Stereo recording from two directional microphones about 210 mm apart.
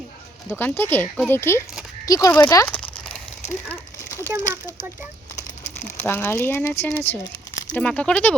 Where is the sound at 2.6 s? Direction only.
5° left (ahead or behind).